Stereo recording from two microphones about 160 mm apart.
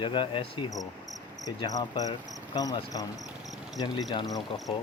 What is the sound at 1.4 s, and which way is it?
Cricket, 25° left (ahead or behind).